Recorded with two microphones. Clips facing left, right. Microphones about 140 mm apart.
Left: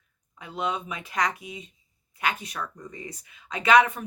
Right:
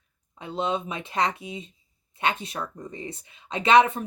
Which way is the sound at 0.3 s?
25° right (ahead or behind).